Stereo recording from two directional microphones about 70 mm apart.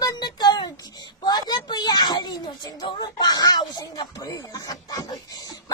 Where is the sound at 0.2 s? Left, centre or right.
Left.